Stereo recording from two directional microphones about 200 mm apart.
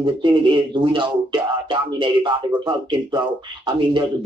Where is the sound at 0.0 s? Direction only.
25° right (ahead or behind).